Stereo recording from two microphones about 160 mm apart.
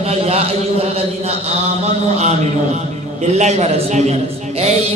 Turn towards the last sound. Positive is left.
turn(degrees=-45)  # may be behind; listen again after turning